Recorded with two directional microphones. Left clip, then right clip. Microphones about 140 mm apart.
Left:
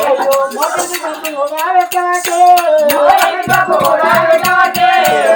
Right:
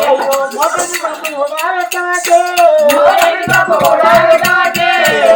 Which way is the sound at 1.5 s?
15° right (ahead or behind).